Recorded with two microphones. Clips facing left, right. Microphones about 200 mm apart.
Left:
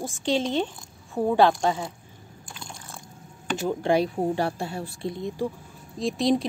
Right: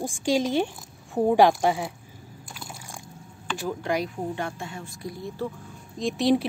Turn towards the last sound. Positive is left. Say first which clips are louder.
# right 1 dB
turn(degrees=-5)  # may be behind; listen again after turning